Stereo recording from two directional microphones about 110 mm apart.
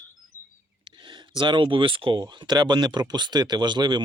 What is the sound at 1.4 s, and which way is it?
Speech, 45° right (ahead or behind).